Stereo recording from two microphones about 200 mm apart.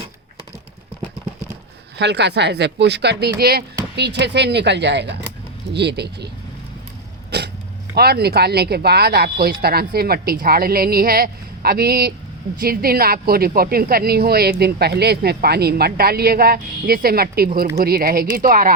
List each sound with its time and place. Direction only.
2.0 s speech: 60° right (ahead or behind)
7.3 s throat clearing: 55° right (ahead or behind)
7.9 s speech: 50° right (ahead or behind)